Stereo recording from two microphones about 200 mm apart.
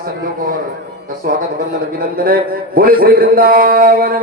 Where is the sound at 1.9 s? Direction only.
45° right (ahead or behind).